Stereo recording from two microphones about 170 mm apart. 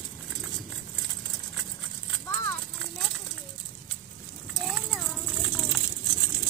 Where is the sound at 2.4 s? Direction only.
10° left (ahead or behind).